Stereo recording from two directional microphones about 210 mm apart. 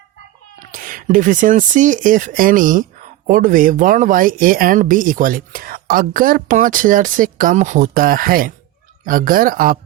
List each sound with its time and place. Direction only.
0.6 s speech: 40° right (ahead or behind)